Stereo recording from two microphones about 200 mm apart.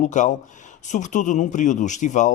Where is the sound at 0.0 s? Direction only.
40° left (ahead or behind).